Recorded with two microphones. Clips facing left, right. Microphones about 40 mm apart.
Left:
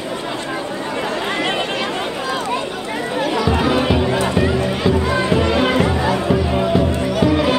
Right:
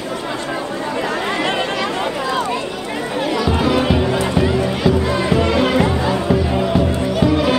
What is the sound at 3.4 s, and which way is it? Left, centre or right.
Music, left.